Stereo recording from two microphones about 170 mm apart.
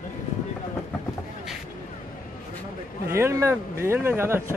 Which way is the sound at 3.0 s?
15° right (ahead or behind).